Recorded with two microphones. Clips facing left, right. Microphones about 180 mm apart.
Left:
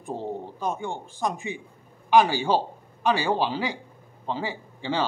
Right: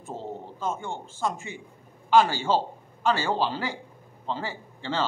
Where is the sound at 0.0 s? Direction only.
15° left (ahead or behind).